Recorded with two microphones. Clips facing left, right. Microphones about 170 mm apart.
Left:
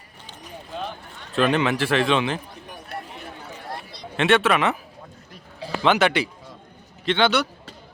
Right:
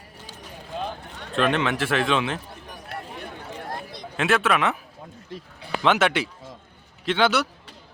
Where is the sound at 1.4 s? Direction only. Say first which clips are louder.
Left 2 dB; centre (ahead or behind).